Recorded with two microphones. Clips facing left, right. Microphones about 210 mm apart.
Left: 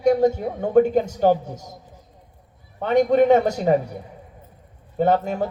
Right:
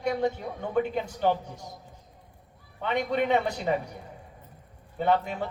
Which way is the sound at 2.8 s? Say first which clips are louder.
Left 11 dB; 45° left (ahead or behind).